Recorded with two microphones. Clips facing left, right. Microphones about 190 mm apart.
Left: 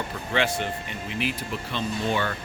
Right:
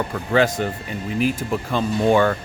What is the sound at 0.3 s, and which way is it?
Speech, 40° right (ahead or behind).